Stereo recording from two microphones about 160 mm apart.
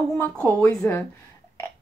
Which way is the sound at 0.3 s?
10° left (ahead or behind).